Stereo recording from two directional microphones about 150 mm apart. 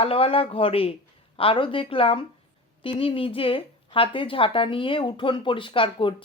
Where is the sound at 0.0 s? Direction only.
40° left (ahead or behind).